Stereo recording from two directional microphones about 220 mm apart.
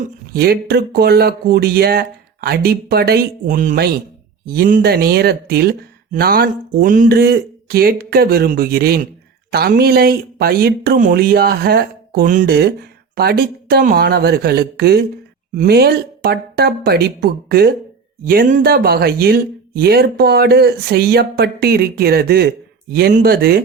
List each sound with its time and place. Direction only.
0.0 s speech: 45° right (ahead or behind)